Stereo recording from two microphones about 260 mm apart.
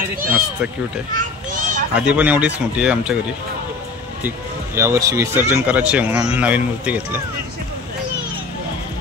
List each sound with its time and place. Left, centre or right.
1.1 s children playing: right
2.0 s speech: centre
4.7 s speech: centre